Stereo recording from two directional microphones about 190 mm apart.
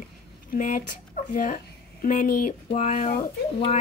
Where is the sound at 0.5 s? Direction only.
40° left (ahead or behind).